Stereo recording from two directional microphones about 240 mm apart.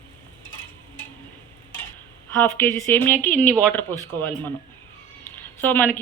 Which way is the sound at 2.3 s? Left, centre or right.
Centre.